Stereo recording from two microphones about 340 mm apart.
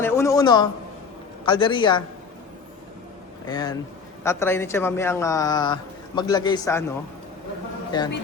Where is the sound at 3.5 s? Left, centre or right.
Centre.